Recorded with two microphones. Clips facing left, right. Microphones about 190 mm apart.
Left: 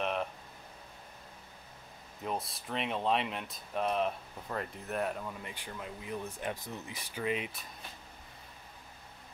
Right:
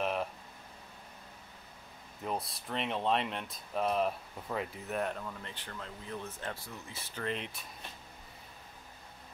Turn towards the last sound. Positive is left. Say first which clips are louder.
# left 3 dB
turn(degrees=10)  # may be behind; listen again after turning